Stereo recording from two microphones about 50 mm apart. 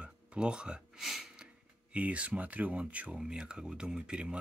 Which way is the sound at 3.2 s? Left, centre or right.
Centre.